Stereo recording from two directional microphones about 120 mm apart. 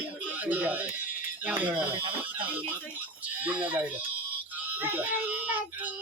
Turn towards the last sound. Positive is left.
turn(degrees=-15)  # may be behind; listen again after turning